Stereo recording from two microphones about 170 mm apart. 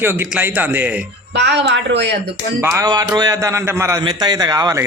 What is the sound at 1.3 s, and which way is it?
Speech, 90° right.